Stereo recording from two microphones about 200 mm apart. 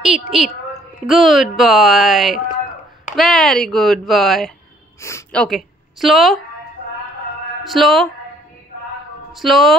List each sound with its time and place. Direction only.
0.0 s a woman's voice: centre (ahead or behind)
7.6 s speech: centre (ahead or behind)
9.3 s speech: centre (ahead or behind)